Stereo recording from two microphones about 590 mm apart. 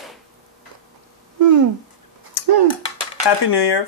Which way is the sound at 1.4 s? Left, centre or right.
Right.